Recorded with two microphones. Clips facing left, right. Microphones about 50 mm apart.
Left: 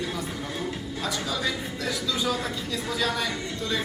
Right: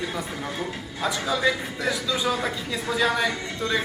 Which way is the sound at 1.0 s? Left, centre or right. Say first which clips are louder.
Right 6 dB; right.